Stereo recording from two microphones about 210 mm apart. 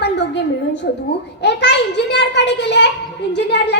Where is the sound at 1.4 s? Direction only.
55° left (ahead or behind).